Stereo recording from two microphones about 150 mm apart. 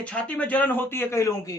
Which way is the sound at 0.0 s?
10° left (ahead or behind).